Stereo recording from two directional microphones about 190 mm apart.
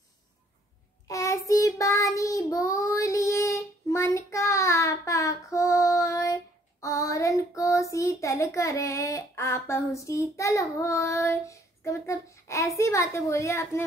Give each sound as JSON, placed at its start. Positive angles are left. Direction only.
{"t": 1.0, "sound": "child singing", "side_deg": 15}